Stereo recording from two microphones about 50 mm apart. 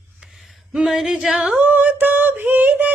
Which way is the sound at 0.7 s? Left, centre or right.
Centre.